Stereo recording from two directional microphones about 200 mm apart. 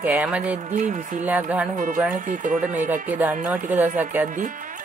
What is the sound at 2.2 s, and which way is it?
Speech, 40° right (ahead or behind).